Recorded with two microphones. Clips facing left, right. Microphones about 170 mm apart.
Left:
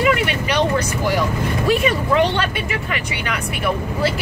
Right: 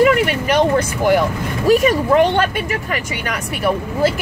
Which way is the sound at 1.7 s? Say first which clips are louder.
Right 6 dB; 40° right (ahead or behind).